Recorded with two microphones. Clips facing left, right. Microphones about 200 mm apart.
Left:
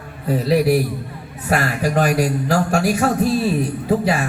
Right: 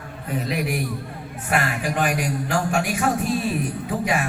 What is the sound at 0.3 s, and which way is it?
Speech, 35° left (ahead or behind).